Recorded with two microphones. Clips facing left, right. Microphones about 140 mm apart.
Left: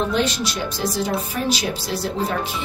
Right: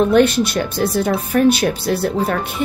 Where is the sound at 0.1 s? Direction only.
55° right (ahead or behind).